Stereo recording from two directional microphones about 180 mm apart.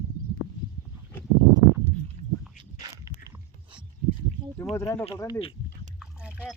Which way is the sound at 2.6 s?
20° right (ahead or behind).